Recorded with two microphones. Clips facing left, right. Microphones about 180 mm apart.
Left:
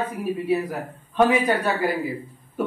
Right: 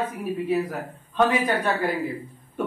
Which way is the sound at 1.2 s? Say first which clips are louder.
Left 2 dB; 10° left (ahead or behind).